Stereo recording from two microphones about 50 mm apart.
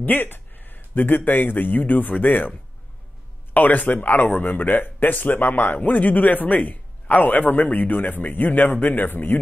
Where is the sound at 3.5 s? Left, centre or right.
Left.